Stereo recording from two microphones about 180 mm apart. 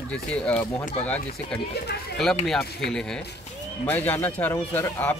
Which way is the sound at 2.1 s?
Centre (ahead or behind).